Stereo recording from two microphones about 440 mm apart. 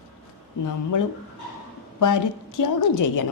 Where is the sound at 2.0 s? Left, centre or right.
Left.